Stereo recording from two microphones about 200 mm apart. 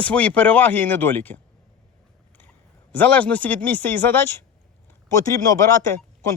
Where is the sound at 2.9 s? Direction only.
10° left (ahead or behind).